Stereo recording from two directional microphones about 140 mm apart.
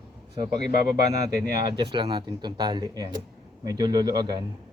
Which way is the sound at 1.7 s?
30° right (ahead or behind).